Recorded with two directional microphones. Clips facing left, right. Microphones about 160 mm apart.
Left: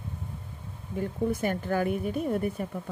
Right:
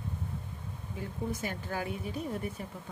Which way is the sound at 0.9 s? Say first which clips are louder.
Left 8 dB; 55° left (ahead or behind).